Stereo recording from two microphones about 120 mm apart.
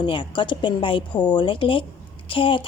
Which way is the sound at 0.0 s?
45° left (ahead or behind).